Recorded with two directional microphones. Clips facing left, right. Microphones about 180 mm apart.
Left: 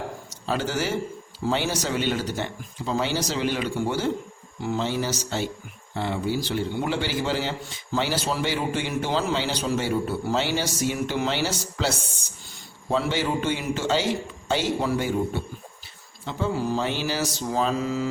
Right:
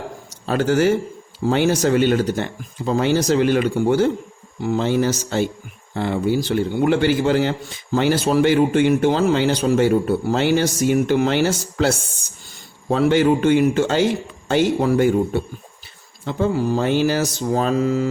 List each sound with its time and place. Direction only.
0.4 s mantra: 55° right (ahead or behind)
7.9 s a man's voice: 55° right (ahead or behind)
16.2 s mantra: 50° right (ahead or behind)